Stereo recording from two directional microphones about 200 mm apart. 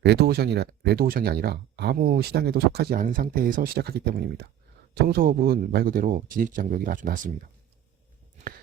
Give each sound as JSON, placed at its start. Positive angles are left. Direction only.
{"t": 0.0, "sound": "speech", "side_deg": -55}